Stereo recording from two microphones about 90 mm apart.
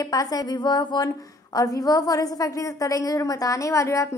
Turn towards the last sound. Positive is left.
turn(degrees=35)  # may be behind; listen again after turning